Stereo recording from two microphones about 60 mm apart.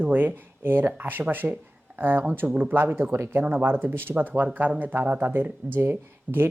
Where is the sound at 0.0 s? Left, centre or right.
Right.